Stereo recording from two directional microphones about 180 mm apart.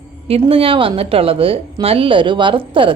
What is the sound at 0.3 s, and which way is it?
A woman's voice, 30° right (ahead or behind).